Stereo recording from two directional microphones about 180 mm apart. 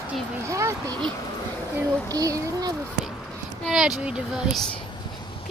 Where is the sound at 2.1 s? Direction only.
20° right (ahead or behind).